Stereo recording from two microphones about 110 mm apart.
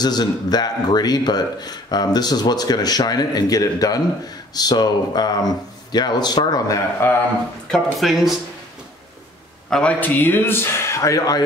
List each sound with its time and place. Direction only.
0.0 s speech: 40° left (ahead or behind)
7.0 s a man's voice: 20° left (ahead or behind)
7.7 s speech: centre (ahead or behind)
9.7 s a man's voice: 10° left (ahead or behind); by 11.4 s 30° left (ahead or behind)